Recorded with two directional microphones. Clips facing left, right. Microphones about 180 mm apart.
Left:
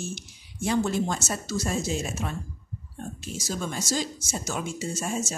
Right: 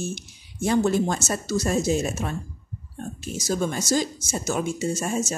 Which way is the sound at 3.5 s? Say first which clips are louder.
Right 6 dB; 45° right (ahead or behind).